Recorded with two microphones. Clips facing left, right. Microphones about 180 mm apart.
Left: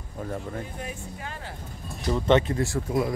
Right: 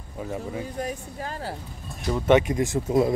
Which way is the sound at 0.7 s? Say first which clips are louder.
Right 5 dB; 40° right (ahead or behind).